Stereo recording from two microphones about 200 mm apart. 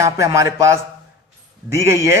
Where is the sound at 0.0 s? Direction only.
15° right (ahead or behind).